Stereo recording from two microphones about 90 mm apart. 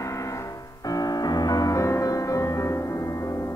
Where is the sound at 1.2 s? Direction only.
45° left (ahead or behind).